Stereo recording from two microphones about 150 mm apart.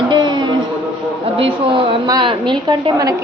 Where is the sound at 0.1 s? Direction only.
30° right (ahead or behind).